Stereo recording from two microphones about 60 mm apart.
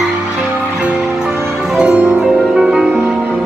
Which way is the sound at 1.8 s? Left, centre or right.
Centre.